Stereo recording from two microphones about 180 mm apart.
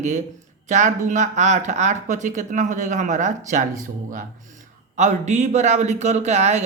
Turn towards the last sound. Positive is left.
turn(degrees=-40)  # may be behind; listen again after turning